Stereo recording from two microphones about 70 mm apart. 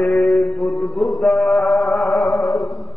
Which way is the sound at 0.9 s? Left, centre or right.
Centre.